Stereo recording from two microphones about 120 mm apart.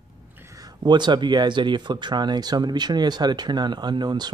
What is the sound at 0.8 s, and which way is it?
Speech, 40° right (ahead or behind).